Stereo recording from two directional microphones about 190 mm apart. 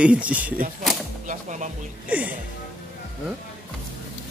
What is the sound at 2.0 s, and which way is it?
Music, 5° right (ahead or behind).